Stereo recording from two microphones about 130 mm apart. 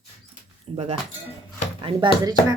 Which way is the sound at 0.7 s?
50° right (ahead or behind).